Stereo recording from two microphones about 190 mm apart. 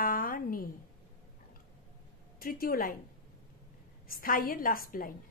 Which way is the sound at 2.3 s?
50° left (ahead or behind).